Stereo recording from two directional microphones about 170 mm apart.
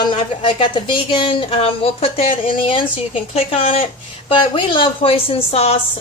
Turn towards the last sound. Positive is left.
turn(degrees=35)  # may be behind; listen again after turning